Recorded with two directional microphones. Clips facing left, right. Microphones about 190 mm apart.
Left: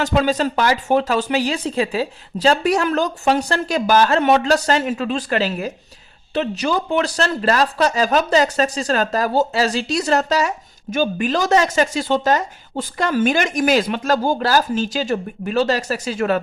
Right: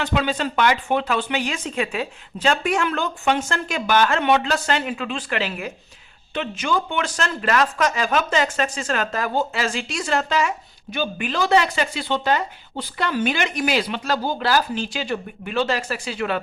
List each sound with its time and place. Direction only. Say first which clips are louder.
0.0 s speech: left 5 dB; 40° left (ahead or behind)